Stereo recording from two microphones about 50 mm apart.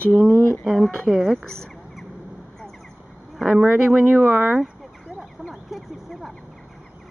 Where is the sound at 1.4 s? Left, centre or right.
Centre.